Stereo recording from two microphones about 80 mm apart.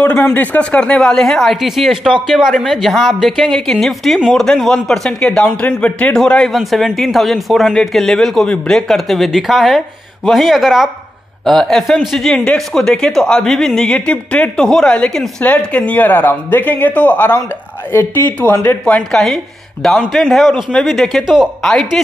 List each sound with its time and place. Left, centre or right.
0.0 s speech: centre
19.1 s speech: centre
21.6 s speech: centre